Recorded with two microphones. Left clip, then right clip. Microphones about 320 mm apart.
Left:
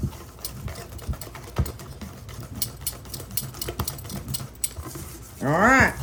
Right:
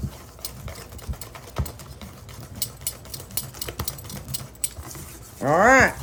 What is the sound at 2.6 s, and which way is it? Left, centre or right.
Sewing machine, centre.